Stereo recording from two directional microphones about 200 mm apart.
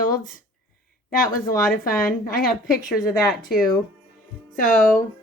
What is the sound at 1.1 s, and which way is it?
Speech, 45° left (ahead or behind).